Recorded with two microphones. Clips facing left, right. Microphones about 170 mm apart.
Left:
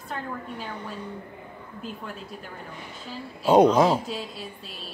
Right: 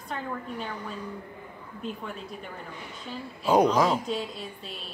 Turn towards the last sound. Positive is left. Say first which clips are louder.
# even
turn(degrees=0)  # may be behind; listen again after turning